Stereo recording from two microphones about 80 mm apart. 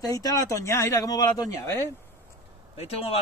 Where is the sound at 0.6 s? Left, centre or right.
Left.